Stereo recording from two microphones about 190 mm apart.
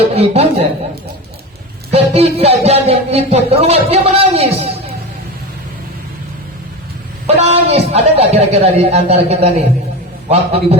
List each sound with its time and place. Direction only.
0.1 s speech: 30° right (ahead or behind)
1.9 s speech: 35° right (ahead or behind)
7.3 s speech: 35° right (ahead or behind)